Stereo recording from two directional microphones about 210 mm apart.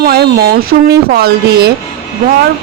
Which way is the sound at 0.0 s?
45° right (ahead or behind).